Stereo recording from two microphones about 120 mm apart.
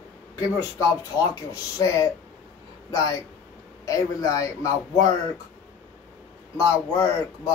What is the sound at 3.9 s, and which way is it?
A man's voice, 30° left (ahead or behind).